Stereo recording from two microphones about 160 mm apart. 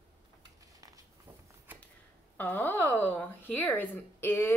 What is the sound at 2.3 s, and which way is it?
A woman's voice, 10° left (ahead or behind).